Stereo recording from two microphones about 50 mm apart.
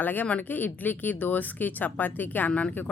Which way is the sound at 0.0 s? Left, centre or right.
Left.